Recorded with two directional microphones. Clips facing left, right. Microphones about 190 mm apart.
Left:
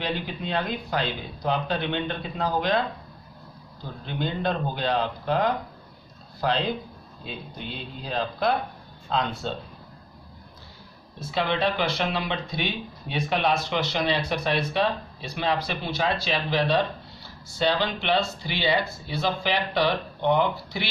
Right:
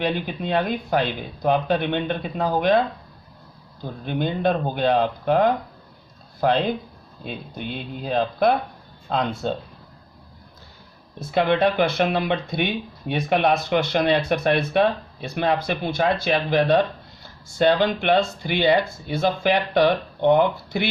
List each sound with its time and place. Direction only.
0.0 s speech: 55° right (ahead or behind)
4.0 s speech: 50° right (ahead or behind)
11.2 s speech: 55° right (ahead or behind)